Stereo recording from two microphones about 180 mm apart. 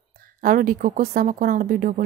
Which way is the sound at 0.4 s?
50° right (ahead or behind).